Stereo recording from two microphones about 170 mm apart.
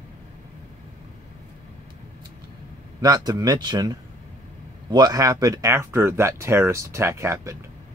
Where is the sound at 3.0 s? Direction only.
25° right (ahead or behind).